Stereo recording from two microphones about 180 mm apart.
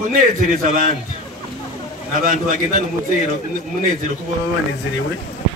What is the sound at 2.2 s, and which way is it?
Speech, 50° right (ahead or behind).